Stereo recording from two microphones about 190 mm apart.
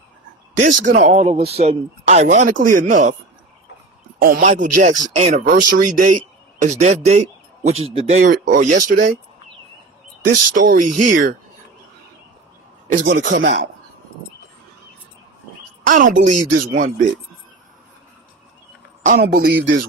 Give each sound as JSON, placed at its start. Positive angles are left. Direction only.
{"t": 0.6, "sound": "speech", "side_deg": -40}
{"t": 4.2, "sound": "speech", "side_deg": -45}
{"t": 10.2, "sound": "speech", "side_deg": -50}
{"t": 12.9, "sound": "speech", "side_deg": -45}
{"t": 15.9, "sound": "speech", "side_deg": -45}
{"t": 19.2, "sound": "speech", "side_deg": -60}